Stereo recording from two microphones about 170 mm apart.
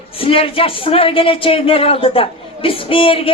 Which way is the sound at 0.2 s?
35° left (ahead or behind).